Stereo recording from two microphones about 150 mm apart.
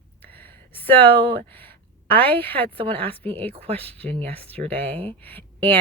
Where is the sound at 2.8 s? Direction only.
40° right (ahead or behind).